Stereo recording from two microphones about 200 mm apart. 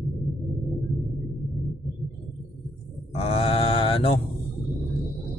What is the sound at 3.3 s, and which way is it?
Mantra, 30° left (ahead or behind).